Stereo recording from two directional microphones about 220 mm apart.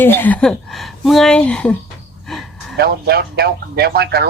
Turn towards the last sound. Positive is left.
turn(degrees=-45)  # may be behind; listen again after turning